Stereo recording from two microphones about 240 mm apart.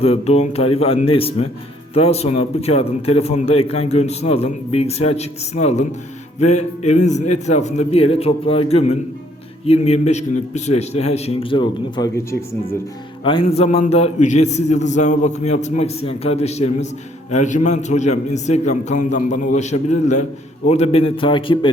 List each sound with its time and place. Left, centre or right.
0.0 s a man's voice: left